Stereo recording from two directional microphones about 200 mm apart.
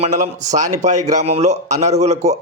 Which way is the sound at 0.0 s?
35° right (ahead or behind).